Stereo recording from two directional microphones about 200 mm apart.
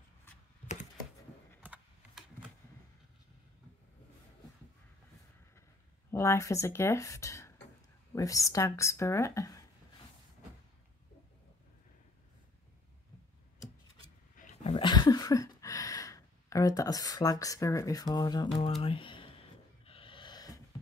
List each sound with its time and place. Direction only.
1.6 s typing: 5° right (ahead or behind)
6.1 s speech: 15° left (ahead or behind)
14.3 s roaring cats: 40° left (ahead or behind)
14.8 s a sound: 20° left (ahead or behind)